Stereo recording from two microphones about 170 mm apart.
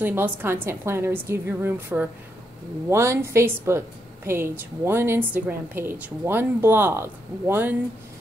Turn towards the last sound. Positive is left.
turn(degrees=-15)  # may be behind; listen again after turning